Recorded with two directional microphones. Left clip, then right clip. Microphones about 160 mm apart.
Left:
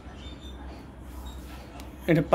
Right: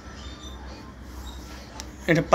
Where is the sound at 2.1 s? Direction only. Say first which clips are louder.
Right 2 dB; 20° left (ahead or behind).